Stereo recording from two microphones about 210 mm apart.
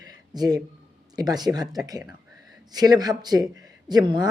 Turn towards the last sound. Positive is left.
turn(degrees=-20)  # may be behind; listen again after turning